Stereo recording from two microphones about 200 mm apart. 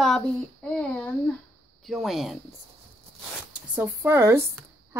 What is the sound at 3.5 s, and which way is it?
Speech, 5° right (ahead or behind).